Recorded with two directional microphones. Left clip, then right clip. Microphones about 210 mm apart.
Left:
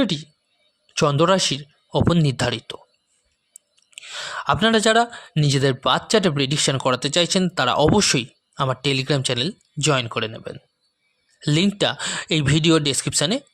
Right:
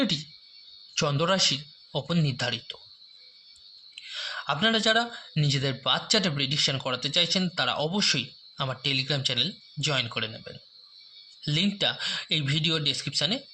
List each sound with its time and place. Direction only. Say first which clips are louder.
0.0 s speech: left 5 dB; 45° left (ahead or behind)
3.9 s speech: left 5 dB; 55° left (ahead or behind)